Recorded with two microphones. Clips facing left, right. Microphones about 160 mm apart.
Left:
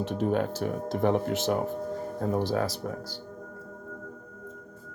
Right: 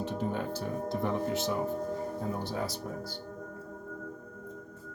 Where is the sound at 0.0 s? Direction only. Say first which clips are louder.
Left 6 dB; 85° left.